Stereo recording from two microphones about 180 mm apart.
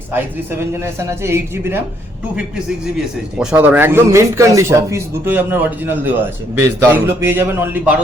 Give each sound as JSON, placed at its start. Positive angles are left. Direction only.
{"t": 0.8, "sound": "a man's voice", "side_deg": -15}